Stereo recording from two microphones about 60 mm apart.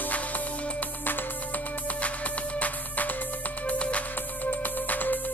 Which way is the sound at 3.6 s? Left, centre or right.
Left.